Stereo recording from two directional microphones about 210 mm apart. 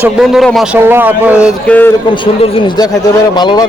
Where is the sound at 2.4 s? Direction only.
25° left (ahead or behind).